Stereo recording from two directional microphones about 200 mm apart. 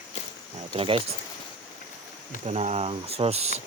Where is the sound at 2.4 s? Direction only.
35° right (ahead or behind).